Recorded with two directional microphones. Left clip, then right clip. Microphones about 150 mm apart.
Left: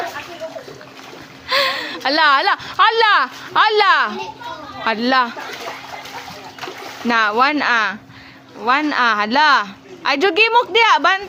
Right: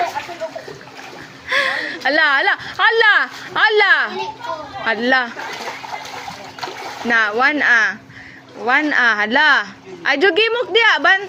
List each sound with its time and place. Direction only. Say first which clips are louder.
1.5 s a woman's voice: even; 30° left (ahead or behind)
7.1 s a woman's voice: even; 35° left (ahead or behind)